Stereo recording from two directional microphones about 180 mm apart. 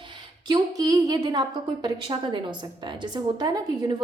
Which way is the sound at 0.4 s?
20° right (ahead or behind).